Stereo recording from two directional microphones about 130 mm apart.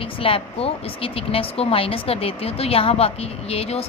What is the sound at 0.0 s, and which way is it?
Speech, 45° left (ahead or behind).